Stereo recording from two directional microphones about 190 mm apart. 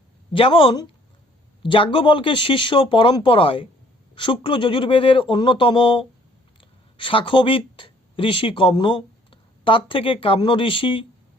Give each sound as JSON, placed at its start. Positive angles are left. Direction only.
{"t": 0.3, "sound": "speech", "side_deg": 25}